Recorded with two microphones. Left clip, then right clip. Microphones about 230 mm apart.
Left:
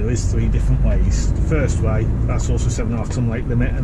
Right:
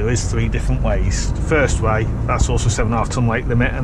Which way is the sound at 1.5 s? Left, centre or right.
Right.